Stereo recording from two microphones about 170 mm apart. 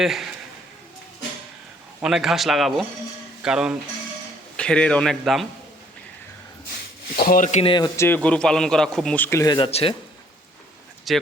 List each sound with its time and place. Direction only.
0.0 s a man's voice: centre (ahead or behind)
2.0 s a man's voice: 5° right (ahead or behind)
4.5 s a man's voice: 5° left (ahead or behind)
7.2 s speech: 55° left (ahead or behind)
7.6 s speech: 30° left (ahead or behind)
7.9 s a man's voice: 10° left (ahead or behind)
11.1 s a man's voice: centre (ahead or behind)